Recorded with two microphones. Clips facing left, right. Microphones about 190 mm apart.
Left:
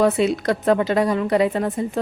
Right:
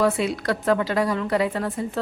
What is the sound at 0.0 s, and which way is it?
Speech, 20° left (ahead or behind).